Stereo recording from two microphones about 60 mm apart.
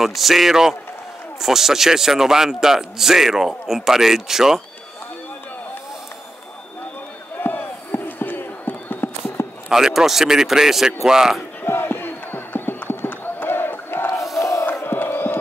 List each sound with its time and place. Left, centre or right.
0.0 s a man's voice: centre
7.3 s a sound: left
9.7 s a man's voice: centre
11.6 s crowd: left